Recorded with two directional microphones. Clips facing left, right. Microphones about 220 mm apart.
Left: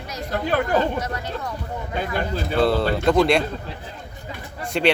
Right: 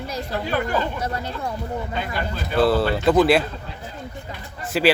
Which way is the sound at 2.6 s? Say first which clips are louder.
Right 1 dB; 5° right (ahead or behind).